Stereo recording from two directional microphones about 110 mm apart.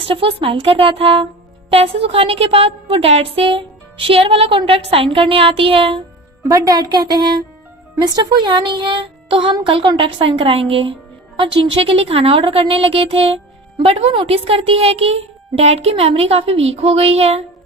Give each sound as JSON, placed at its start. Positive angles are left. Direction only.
{"t": 0.0, "sound": "speech", "side_deg": -55}
{"t": 6.5, "sound": "a woman's voice", "side_deg": -35}